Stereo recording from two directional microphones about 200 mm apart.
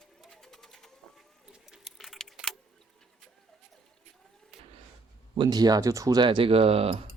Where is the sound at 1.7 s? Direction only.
Centre (ahead or behind).